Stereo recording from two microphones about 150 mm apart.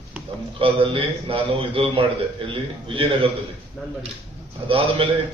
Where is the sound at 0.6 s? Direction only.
35° right (ahead or behind).